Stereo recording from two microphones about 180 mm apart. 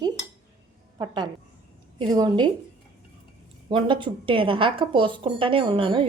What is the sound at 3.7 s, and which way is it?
Speech, 25° right (ahead or behind).